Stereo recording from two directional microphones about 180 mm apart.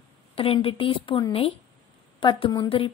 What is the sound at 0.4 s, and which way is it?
A woman's voice, 30° left (ahead or behind).